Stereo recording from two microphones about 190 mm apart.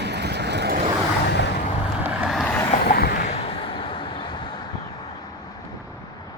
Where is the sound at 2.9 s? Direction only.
55° left (ahead or behind).